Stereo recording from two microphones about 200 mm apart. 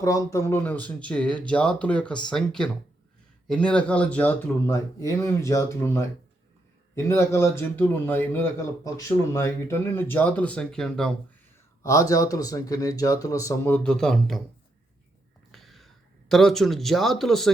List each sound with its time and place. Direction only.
0.0 s speech: 15° left (ahead or behind)
11.8 s speech: 15° left (ahead or behind)
15.5 s gasp: centre (ahead or behind)
16.3 s speech: centre (ahead or behind)